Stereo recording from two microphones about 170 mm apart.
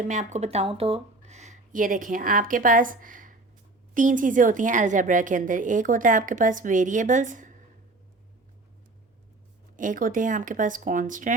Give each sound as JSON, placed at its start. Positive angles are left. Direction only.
{"t": 0.1, "sound": "a woman's voice", "side_deg": -45}
{"t": 9.7, "sound": "a woman's voice", "side_deg": -50}